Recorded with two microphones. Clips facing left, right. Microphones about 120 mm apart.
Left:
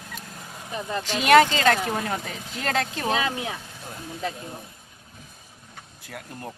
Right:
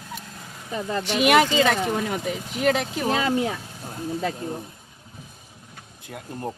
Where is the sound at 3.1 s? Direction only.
35° right (ahead or behind).